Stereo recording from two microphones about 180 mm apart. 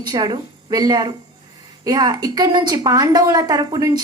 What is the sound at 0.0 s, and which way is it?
A woman's voice, 25° right (ahead or behind).